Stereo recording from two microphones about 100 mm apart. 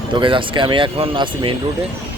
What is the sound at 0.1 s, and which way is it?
Speech, 55° right (ahead or behind).